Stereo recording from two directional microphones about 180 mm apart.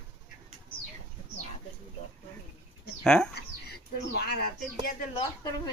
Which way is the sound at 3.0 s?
5° left (ahead or behind).